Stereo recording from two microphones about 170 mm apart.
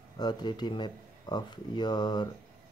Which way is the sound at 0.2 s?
25° left (ahead or behind).